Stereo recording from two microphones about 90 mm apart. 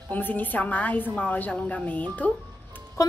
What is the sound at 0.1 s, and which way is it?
A woman's voice, 20° left (ahead or behind).